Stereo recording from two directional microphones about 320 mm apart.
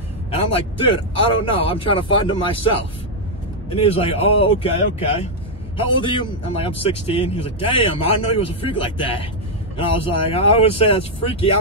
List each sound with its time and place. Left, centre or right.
0.3 s a man's voice: centre
5.8 s speech: centre